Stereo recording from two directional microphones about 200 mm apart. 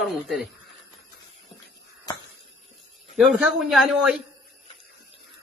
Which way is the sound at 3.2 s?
5° right (ahead or behind).